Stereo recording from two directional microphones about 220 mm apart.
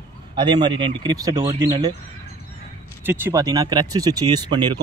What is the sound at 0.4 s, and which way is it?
Speech, 20° right (ahead or behind).